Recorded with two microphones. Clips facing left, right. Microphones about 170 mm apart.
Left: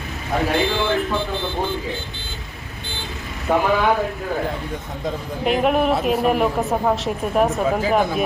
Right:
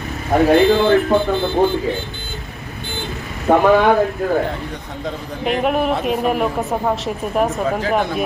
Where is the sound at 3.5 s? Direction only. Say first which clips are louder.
Right 5 dB; 40° right (ahead or behind).